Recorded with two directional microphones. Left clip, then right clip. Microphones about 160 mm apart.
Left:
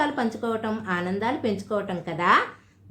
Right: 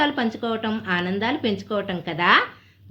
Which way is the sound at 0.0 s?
35° right (ahead or behind).